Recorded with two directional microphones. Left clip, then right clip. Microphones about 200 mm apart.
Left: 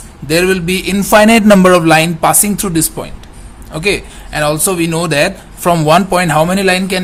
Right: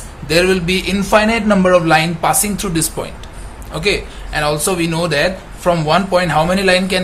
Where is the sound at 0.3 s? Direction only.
40° left (ahead or behind).